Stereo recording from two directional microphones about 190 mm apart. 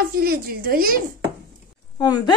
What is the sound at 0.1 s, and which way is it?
Speech, 50° right (ahead or behind).